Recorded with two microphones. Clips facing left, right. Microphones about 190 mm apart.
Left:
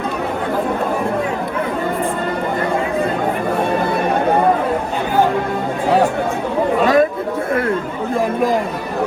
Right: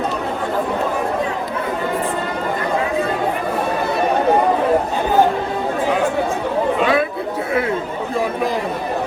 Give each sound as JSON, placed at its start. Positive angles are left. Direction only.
{"t": 6.8, "sound": "chatter", "side_deg": 40}